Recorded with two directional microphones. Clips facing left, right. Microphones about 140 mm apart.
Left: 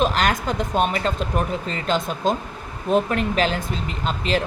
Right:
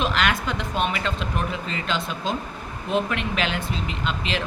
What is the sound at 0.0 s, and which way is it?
Speech, 40° left (ahead or behind).